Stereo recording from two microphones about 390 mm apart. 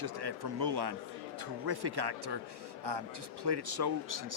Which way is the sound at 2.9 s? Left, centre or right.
Right.